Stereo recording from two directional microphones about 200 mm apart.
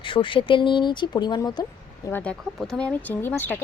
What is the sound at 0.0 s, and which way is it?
Speech, 25° left (ahead or behind).